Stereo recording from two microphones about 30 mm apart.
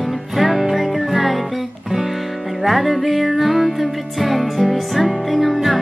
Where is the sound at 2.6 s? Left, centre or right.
Centre.